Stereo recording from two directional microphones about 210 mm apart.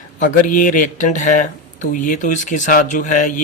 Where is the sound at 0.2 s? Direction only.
35° left (ahead or behind).